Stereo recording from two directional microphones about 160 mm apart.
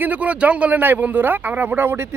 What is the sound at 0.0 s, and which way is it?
Speech, 10° right (ahead or behind).